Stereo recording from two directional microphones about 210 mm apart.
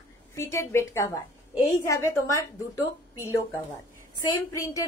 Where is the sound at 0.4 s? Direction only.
15° left (ahead or behind).